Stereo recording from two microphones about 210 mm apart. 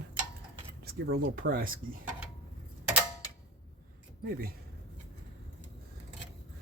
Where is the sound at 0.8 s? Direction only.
45° right (ahead or behind).